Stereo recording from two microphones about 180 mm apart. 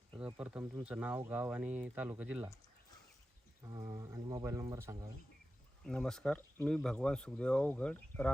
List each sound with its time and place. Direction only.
0.3 s speech: 5° right (ahead or behind)
3.7 s speech: 15° right (ahead or behind)
5.8 s speech: 5° left (ahead or behind)